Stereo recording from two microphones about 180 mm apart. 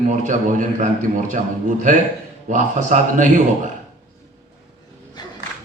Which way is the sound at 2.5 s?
45° right (ahead or behind).